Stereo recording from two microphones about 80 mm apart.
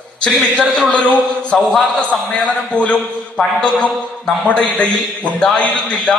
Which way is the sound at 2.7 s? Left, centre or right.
Centre.